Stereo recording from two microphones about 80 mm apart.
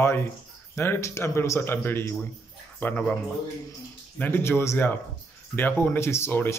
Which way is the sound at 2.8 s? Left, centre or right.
Centre.